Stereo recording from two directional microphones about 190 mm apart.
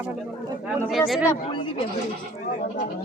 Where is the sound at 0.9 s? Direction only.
Centre (ahead or behind).